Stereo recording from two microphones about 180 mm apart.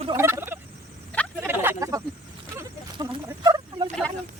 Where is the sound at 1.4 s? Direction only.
10° right (ahead or behind).